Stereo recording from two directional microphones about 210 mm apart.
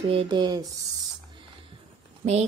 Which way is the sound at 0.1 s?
20° right (ahead or behind).